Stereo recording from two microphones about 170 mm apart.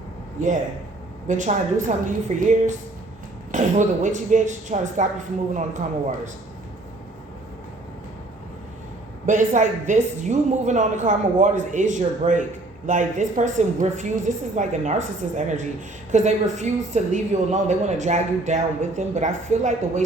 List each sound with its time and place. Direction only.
1.3 s speech: 45° right (ahead or behind)
9.2 s speech: 45° right (ahead or behind)